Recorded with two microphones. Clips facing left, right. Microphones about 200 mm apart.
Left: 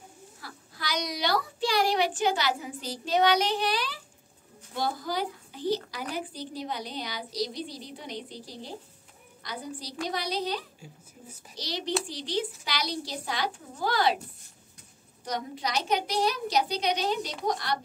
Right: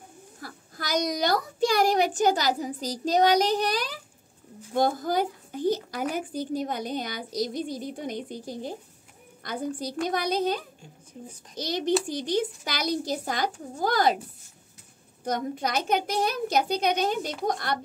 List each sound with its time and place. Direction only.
0.4 s a woman's voice: 45° right (ahead or behind)
10.8 s speech: 5° left (ahead or behind)
11.5 s a woman's voice: 50° right (ahead or behind)
15.2 s a woman's voice: 50° right (ahead or behind)